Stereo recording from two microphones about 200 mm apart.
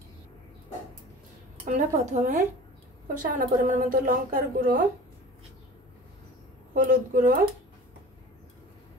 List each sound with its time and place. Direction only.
1.7 s a woman's voice: 40° right (ahead or behind)
6.7 s a woman's voice: 40° right (ahead or behind)